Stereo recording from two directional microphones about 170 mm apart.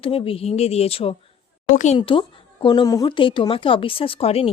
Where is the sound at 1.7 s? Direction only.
45° left (ahead or behind).